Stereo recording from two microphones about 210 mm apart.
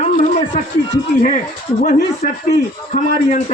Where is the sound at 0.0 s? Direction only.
35° left (ahead or behind).